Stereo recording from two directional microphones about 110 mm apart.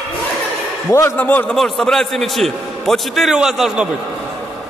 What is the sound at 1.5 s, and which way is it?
A man's voice, 5° left (ahead or behind).